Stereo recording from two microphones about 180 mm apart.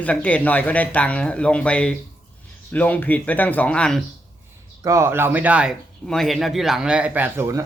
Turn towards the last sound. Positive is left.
turn(degrees=-15)  # may be behind; listen again after turning